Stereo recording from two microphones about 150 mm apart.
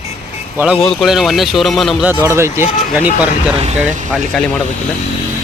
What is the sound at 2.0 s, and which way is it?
Speech, 15° right (ahead or behind).